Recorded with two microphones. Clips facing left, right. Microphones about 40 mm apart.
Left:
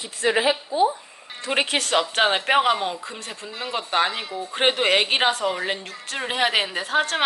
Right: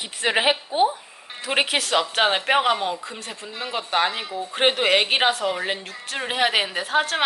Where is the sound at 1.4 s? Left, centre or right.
Centre.